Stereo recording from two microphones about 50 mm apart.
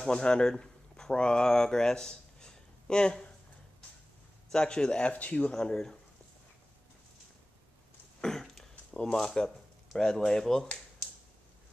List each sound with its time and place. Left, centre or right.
0.0 s speech: centre
4.5 s speech: centre
5.1 s speech: left
5.5 s speech: centre
8.2 s throat clearing: centre
9.9 s speech: centre